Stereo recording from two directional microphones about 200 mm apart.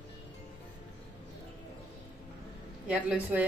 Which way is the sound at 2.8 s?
5° right (ahead or behind).